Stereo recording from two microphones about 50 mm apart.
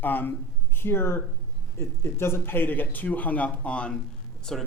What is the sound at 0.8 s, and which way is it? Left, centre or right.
Speech, left.